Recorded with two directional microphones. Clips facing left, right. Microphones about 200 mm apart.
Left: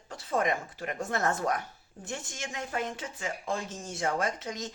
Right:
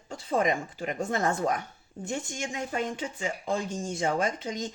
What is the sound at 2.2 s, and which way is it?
Speech, centre (ahead or behind).